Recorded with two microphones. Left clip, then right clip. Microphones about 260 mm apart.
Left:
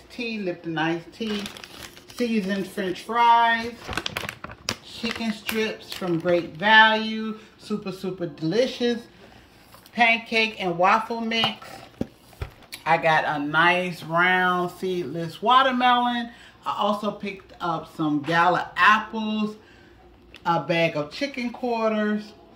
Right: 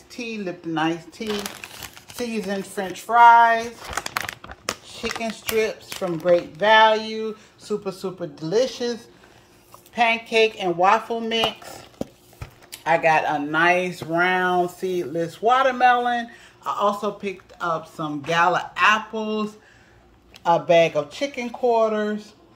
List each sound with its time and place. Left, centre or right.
0.1 s speech: centre
9.9 s speech: centre
12.7 s speech: centre
20.4 s speech: centre